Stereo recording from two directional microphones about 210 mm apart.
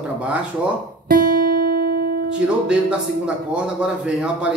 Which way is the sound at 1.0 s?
40° right (ahead or behind).